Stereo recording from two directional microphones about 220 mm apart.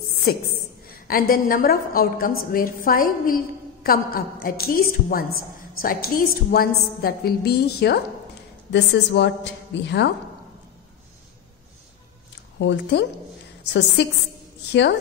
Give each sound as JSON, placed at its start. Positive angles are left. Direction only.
{"t": 0.3, "sound": "a woman's voice", "side_deg": 45}
{"t": 12.5, "sound": "a woman's voice", "side_deg": 50}
{"t": 14.7, "sound": "a woman's voice", "side_deg": 50}